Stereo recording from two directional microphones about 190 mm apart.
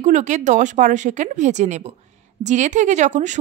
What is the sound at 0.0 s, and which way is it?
Speech, 40° right (ahead or behind).